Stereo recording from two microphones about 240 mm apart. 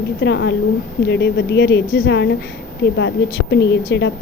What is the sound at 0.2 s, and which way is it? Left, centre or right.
A woman's voice, left.